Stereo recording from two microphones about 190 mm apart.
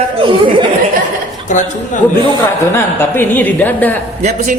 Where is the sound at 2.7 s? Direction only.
10° left (ahead or behind).